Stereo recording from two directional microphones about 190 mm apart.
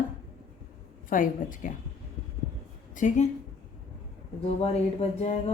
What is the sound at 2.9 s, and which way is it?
Speech, 40° left (ahead or behind).